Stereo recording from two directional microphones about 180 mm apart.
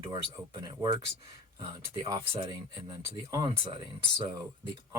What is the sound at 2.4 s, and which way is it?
Speech, 20° right (ahead or behind).